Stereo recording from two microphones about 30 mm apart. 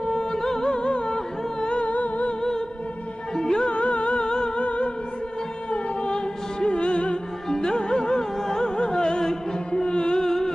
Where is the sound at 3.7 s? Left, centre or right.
Left.